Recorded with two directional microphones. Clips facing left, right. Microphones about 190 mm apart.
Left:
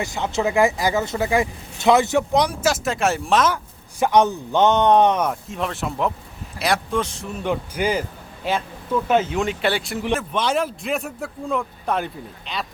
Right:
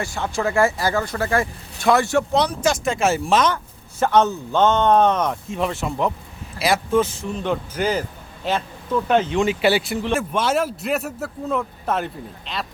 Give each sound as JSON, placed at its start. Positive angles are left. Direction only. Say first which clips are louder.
{"t": 0.0, "sound": "speech", "louder": "left 1 dB", "side_deg": 20}
{"t": 4.0, "sound": "a man's voice", "louder": "even", "side_deg": 15}
{"t": 7.3, "sound": "a man's voice", "louder": "even", "side_deg": 10}